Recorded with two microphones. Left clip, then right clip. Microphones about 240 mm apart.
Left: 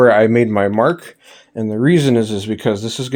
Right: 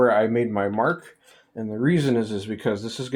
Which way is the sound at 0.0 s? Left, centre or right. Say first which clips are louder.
Left 8 dB; left.